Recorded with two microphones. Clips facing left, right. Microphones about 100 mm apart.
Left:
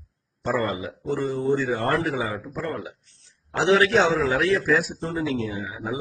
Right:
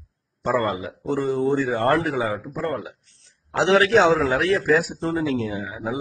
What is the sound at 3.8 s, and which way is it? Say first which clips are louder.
Speech: right 3 dB; 60° right (ahead or behind).